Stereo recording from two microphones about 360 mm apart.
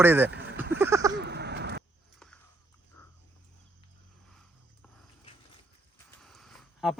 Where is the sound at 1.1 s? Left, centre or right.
Right.